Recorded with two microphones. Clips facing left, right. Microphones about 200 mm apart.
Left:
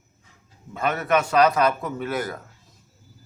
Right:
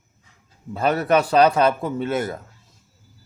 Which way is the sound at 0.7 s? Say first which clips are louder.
Right 4 dB; 35° right (ahead or behind).